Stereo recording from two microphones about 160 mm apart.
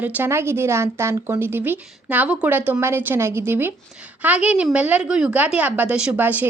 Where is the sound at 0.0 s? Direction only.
10° right (ahead or behind).